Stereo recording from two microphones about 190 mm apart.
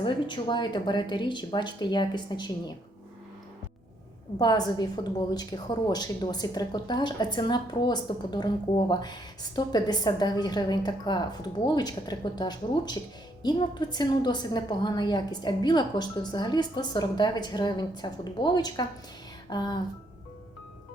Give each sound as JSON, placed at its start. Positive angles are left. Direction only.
{"t": 0.0, "sound": "speech", "side_deg": 25}
{"t": 4.4, "sound": "speech", "side_deg": 20}